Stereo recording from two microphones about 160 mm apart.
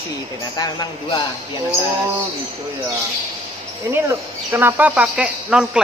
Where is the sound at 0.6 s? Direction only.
25° left (ahead or behind).